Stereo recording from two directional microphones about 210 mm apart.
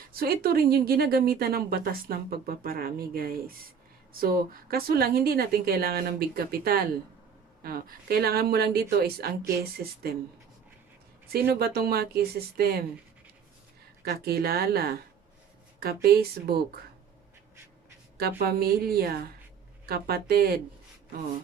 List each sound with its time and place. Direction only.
0.1 s speech: 45° right (ahead or behind)
11.3 s speech: 50° right (ahead or behind)
14.0 s speech: 50° right (ahead or behind)
18.2 s speech: 45° right (ahead or behind)